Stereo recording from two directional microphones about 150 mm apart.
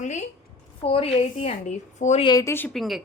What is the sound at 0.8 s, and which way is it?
A woman's voice, 40° left (ahead or behind).